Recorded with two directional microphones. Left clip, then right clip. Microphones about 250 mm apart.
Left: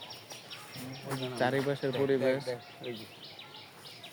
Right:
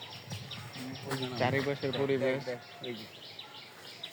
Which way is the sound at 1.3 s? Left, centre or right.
Centre.